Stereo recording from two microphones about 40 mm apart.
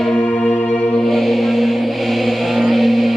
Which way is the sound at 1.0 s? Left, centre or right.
Centre.